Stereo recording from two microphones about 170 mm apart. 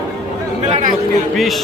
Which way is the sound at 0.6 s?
45° right (ahead or behind).